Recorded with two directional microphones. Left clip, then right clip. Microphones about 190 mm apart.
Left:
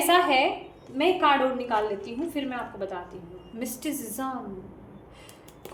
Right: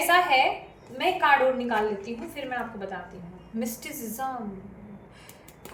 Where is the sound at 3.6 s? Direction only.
45° left (ahead or behind).